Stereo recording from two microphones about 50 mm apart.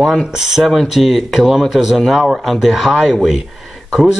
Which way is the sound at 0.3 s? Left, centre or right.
Centre.